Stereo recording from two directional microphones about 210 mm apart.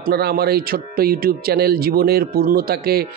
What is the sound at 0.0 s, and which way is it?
Speech, 45° right (ahead or behind).